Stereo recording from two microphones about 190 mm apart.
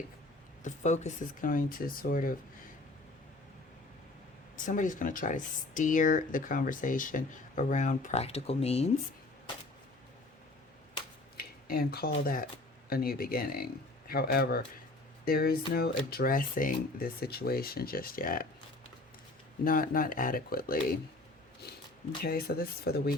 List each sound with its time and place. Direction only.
0.6 s speech: 40° left (ahead or behind)
4.6 s speech: 45° left (ahead or behind)
11.3 s a sound: 50° left (ahead or behind)
12.2 s speech: 50° left (ahead or behind)
19.6 s speech: 50° left (ahead or behind)
22.2 s speech: 50° left (ahead or behind)